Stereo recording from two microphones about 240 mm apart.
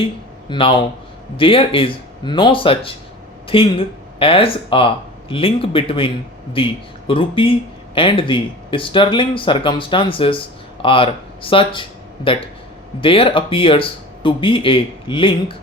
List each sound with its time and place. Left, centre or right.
0.0 s speech: left